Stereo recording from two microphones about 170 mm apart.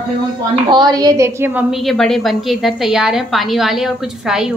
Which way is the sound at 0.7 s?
25° right (ahead or behind).